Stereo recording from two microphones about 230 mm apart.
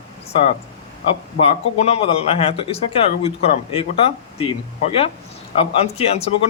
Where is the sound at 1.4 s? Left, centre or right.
Left.